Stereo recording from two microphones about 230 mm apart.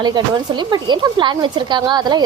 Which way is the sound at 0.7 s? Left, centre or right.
Centre.